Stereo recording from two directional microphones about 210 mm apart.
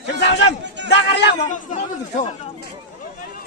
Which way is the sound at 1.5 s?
35° left (ahead or behind).